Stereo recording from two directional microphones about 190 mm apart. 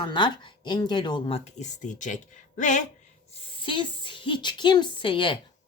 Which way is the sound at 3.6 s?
25° left (ahead or behind).